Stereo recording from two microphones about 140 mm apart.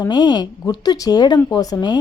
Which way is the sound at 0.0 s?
30° left (ahead or behind).